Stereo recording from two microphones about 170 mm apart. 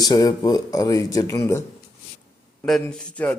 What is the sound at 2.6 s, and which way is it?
Speech, centre (ahead or behind).